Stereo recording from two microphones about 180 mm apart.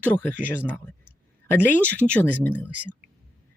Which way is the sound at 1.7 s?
10° left (ahead or behind).